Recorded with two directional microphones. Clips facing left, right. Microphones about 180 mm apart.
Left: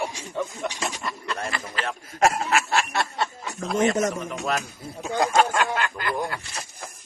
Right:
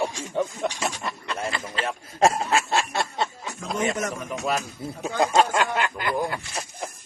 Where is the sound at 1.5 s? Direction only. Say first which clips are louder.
Right 1 dB; 25° right (ahead or behind).